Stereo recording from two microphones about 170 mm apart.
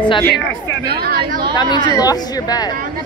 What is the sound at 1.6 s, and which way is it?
Speech, 25° left (ahead or behind).